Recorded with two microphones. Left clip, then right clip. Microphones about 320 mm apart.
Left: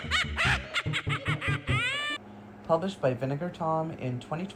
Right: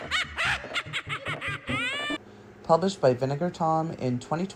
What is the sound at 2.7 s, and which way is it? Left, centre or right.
Speech, centre.